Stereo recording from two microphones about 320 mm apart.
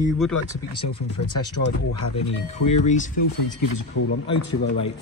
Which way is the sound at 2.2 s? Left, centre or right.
Left.